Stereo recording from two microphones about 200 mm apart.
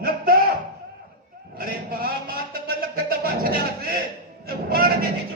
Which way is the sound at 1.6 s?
45° right (ahead or behind).